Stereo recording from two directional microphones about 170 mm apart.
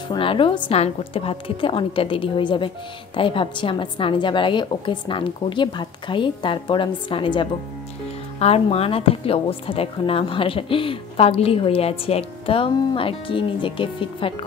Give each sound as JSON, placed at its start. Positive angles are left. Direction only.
{"t": 0.1, "sound": "a woman's voice", "side_deg": 30}